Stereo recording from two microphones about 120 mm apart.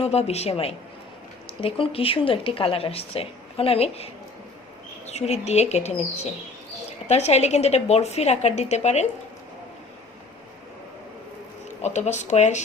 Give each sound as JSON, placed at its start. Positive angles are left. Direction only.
{"t": 0.0, "sound": "a woman's voice", "side_deg": 60}
{"t": 7.1, "sound": "a woman's voice", "side_deg": 65}
{"t": 11.8, "sound": "speech", "side_deg": 75}